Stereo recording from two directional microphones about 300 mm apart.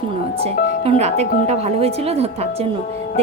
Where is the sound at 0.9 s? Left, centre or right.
Right.